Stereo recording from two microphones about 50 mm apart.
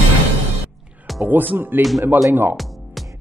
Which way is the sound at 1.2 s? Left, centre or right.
Right.